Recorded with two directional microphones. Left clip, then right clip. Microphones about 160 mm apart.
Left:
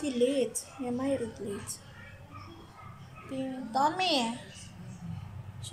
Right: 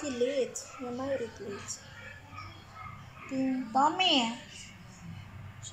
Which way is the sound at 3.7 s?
15° right (ahead or behind).